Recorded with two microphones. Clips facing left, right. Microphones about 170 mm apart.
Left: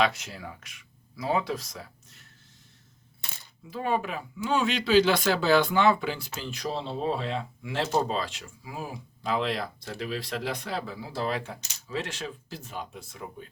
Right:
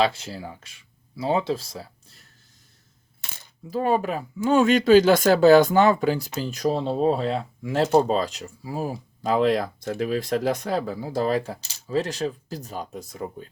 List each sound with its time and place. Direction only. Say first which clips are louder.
0.0 s speech: right 4 dB; 30° right (ahead or behind)
3.7 s speech: right 6 dB; 40° right (ahead or behind)